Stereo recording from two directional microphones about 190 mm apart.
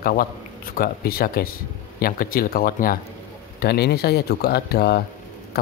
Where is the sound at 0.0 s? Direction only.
50° left (ahead or behind).